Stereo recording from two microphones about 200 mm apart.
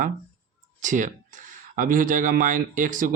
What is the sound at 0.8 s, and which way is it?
Speech, 40° right (ahead or behind).